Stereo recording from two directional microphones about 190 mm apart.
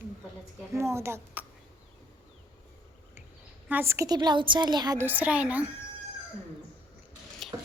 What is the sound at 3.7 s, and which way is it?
A woman's voice, 10° right (ahead or behind).